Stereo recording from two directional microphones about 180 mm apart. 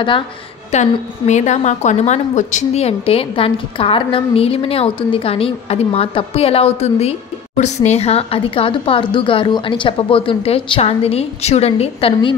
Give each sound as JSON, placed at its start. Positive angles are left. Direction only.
{"t": 0.7, "sound": "a woman's voice", "side_deg": 40}